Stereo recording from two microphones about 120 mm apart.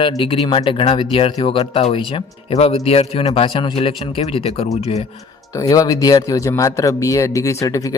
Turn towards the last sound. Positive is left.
turn(degrees=30)  # may be behind; listen again after turning